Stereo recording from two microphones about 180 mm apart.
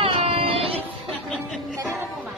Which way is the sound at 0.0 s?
30° right (ahead or behind).